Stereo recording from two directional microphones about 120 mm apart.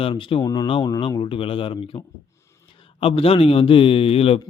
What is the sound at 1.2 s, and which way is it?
Speech, 50° left (ahead or behind).